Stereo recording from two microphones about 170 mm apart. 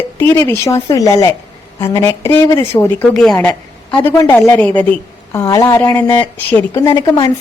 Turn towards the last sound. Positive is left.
turn(degrees=20)  # may be behind; listen again after turning